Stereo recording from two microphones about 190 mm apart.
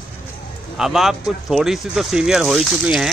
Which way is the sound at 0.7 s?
Centre (ahead or behind).